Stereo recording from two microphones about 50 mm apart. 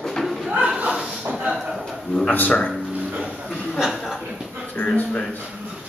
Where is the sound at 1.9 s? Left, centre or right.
Centre.